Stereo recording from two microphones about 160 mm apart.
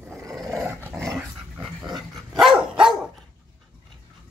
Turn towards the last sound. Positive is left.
turn(degrees=0)  # may be behind; listen again after turning